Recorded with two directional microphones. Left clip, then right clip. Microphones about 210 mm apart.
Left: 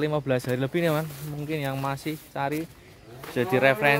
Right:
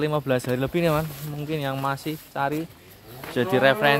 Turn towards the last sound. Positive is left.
turn(degrees=5)  # may be behind; listen again after turning